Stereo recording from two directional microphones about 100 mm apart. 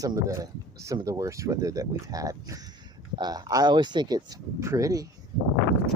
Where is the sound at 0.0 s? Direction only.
35° right (ahead or behind).